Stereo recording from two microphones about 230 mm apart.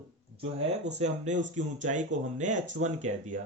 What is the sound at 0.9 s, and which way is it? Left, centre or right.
Speech, right.